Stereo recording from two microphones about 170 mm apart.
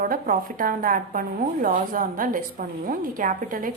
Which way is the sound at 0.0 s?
55° right (ahead or behind).